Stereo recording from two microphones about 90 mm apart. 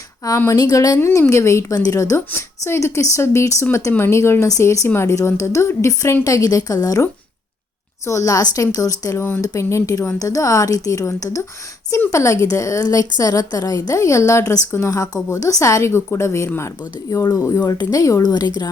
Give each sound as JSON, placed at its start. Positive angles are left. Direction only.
{"t": 0.5, "sound": "speech", "side_deg": 40}
{"t": 0.9, "sound": "a woman's voice", "side_deg": 30}
{"t": 17.6, "sound": "speech", "side_deg": 45}